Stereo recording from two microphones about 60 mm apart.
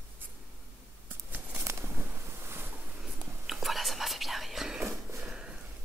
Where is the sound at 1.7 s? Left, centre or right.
Right.